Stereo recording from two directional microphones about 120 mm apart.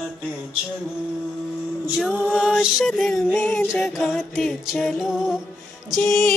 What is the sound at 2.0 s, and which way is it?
Music, 5° right (ahead or behind).